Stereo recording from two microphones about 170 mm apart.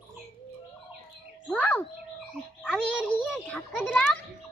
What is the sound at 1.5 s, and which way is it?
Speech, 10° left (ahead or behind).